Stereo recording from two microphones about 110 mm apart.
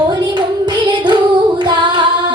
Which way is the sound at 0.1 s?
45° right (ahead or behind).